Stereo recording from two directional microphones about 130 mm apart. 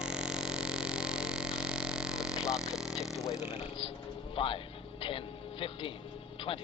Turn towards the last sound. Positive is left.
turn(degrees=45)  # may be behind; listen again after turning